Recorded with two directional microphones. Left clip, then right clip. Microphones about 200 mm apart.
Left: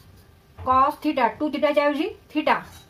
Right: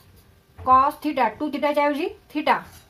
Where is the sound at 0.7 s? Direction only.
35° right (ahead or behind).